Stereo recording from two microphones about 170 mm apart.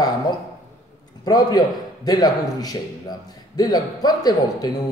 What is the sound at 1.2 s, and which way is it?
A man's voice, 25° left (ahead or behind).